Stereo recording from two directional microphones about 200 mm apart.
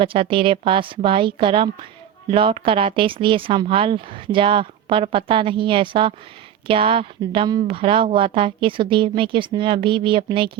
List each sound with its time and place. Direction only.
0.0 s speech: 25° right (ahead or behind)